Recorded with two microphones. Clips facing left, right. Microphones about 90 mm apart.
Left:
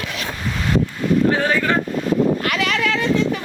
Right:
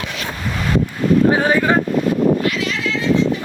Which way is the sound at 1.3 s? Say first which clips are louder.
Right 3 dB; 15° right (ahead or behind).